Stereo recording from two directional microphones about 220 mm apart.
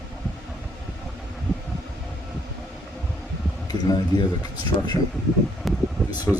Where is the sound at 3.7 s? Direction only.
15° left (ahead or behind).